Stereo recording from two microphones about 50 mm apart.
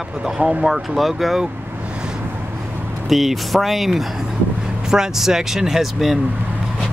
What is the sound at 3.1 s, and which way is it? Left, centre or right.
Speech, centre.